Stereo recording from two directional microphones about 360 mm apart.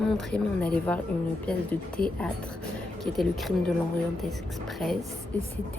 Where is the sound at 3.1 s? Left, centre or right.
Centre.